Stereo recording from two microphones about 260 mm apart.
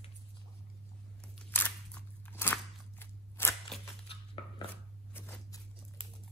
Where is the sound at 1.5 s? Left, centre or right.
Centre.